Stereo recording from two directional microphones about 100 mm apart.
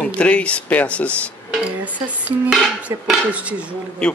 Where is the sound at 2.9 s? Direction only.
30° right (ahead or behind).